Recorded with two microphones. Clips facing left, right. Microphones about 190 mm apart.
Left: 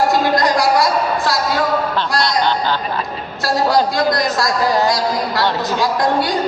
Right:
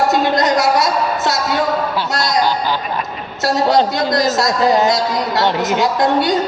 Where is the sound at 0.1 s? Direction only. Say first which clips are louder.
Right 1 dB; 20° right (ahead or behind).